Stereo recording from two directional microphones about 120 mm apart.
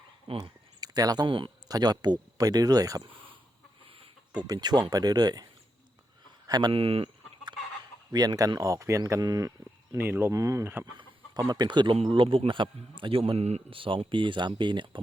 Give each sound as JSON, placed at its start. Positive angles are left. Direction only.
{"t": 0.3, "sound": "a sound", "side_deg": -35}
{"t": 1.7, "sound": "speech", "side_deg": -35}
{"t": 3.8, "sound": "chicken", "side_deg": -50}
{"t": 4.4, "sound": "speech", "side_deg": -35}
{"t": 6.5, "sound": "speech", "side_deg": -35}
{"t": 6.7, "sound": "chicken", "side_deg": -50}
{"t": 8.1, "sound": "speech", "side_deg": -35}
{"t": 9.9, "sound": "speech", "side_deg": -20}
{"t": 10.9, "sound": "speech", "side_deg": -35}
{"t": 13.7, "sound": "speech", "side_deg": -45}